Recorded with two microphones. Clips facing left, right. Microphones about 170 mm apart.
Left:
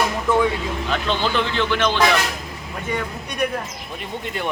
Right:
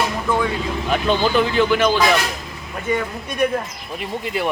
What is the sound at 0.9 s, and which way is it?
A man's voice, 15° right (ahead or behind).